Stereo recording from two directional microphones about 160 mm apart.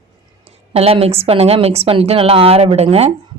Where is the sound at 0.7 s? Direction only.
40° right (ahead or behind).